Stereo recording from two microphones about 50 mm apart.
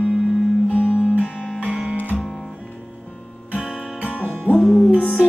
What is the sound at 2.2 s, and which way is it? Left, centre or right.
Music, centre.